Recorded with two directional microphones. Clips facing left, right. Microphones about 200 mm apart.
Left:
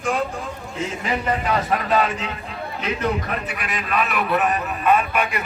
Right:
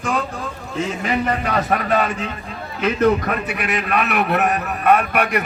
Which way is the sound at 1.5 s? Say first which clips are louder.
Even; 55° right (ahead or behind).